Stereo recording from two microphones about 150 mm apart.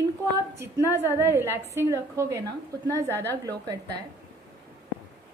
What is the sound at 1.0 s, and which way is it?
A woman's voice, 15° right (ahead or behind).